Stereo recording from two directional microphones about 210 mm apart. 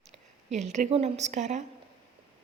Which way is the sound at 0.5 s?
35° right (ahead or behind).